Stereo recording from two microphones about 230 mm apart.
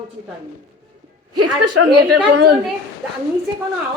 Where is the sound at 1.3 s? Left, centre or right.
Right.